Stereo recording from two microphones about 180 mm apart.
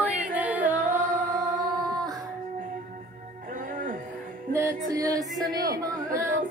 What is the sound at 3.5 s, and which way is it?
Music, 50° right (ahead or behind).